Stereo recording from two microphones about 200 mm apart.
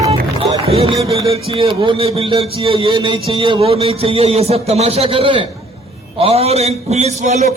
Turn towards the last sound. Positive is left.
turn(degrees=-35)  # may be behind; listen again after turning